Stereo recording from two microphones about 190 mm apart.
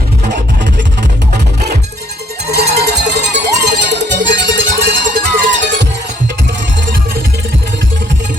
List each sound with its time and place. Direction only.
2.5 s cowbell: 60° right (ahead or behind)
4.9 s music: 45° right (ahead or behind)